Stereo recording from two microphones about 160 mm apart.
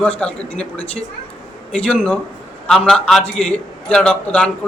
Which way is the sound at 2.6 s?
5° left (ahead or behind).